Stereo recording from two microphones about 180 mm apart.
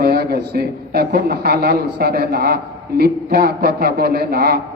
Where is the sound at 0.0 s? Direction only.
60° right (ahead or behind).